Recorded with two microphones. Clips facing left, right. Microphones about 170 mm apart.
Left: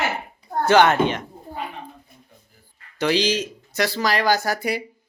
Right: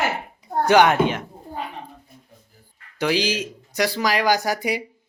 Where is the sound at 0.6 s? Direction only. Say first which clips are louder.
Even; 15° right (ahead or behind).